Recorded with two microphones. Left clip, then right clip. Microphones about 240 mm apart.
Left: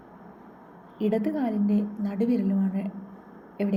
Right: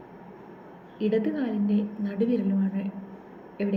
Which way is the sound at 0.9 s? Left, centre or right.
Left.